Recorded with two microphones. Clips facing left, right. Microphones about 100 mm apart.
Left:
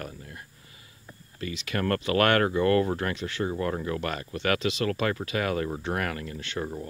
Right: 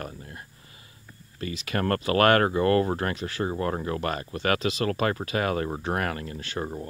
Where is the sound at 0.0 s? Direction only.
30° right (ahead or behind).